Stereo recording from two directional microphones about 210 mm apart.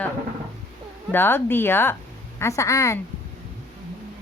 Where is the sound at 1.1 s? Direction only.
10° left (ahead or behind).